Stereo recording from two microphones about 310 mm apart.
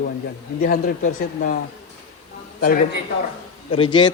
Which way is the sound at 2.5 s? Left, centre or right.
Left.